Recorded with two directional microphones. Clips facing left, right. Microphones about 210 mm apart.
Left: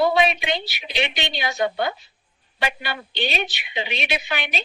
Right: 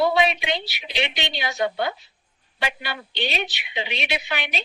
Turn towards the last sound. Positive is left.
turn(degrees=50)  # may be behind; listen again after turning